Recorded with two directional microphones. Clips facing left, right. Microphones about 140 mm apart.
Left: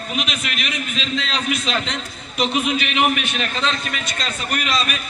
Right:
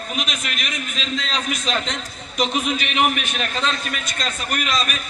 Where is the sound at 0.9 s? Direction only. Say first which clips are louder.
Left 2 dB; 40° right (ahead or behind).